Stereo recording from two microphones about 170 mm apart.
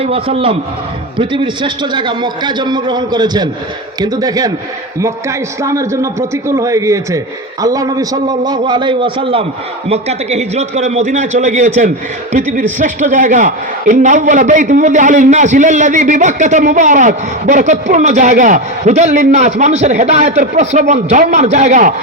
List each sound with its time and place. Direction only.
0.0 s a man's voice: 35° right (ahead or behind)